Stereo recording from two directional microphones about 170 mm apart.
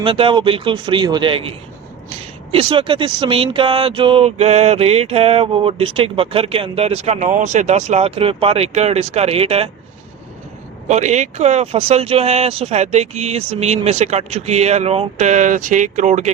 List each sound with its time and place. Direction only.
0.0 s speech: 30° right (ahead or behind)
10.8 s speech: 45° right (ahead or behind)